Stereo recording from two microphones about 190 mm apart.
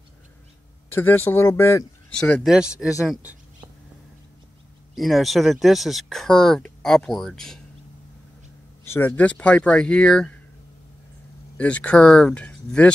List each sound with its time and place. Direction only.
0.9 s speech: 10° left (ahead or behind); by 3.3 s 5° right (ahead or behind)
4.9 s speech: centre (ahead or behind)
8.9 s speech: 10° left (ahead or behind)
11.5 s speech: 5° left (ahead or behind)